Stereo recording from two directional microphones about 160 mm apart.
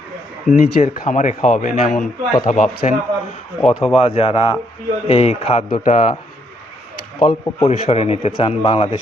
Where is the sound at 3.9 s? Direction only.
35° left (ahead or behind).